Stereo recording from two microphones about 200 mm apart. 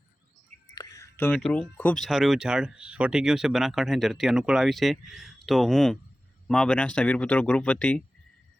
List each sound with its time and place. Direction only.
0.8 s speech: 15° left (ahead or behind)